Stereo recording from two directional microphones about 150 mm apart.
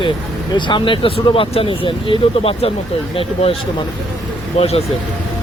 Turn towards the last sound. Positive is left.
turn(degrees=40)  # may be behind; listen again after turning